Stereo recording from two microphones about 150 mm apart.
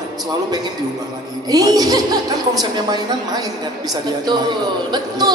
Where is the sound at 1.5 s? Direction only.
25° right (ahead or behind).